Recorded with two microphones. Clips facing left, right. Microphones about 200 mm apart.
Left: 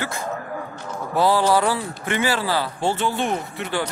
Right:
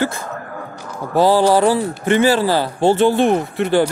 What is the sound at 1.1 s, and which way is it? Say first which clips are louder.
Speech: right 5 dB; 40° right (ahead or behind).